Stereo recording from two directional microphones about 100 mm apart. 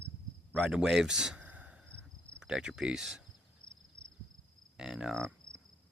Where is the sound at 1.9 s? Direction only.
15° left (ahead or behind).